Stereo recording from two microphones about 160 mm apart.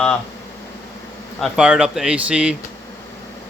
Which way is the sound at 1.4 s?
5° right (ahead or behind).